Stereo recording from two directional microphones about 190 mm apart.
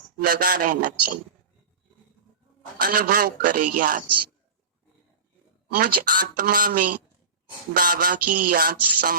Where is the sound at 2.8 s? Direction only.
50° right (ahead or behind).